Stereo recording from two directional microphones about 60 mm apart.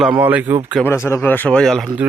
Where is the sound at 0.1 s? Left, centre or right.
Right.